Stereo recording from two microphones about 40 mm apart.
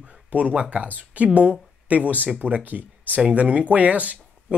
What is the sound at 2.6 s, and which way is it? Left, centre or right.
Speech, right.